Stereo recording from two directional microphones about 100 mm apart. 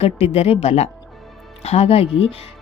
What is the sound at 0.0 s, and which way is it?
A woman's voice, 90° left.